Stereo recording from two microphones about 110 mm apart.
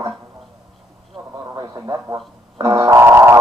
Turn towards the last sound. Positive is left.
turn(degrees=-20)  # may be behind; listen again after turning